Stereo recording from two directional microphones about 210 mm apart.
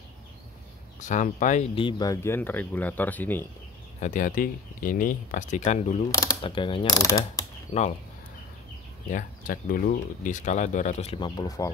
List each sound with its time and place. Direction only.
0.9 s speech: 35° left (ahead or behind); by 3.4 s 10° left (ahead or behind)
4.0 s speech: 40° left (ahead or behind)
6.1 s speech: 20° left (ahead or behind)
9.1 s speech: 40° left (ahead or behind); by 11.7 s 15° left (ahead or behind)